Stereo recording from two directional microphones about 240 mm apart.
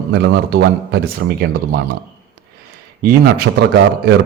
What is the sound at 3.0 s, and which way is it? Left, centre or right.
Speech, right.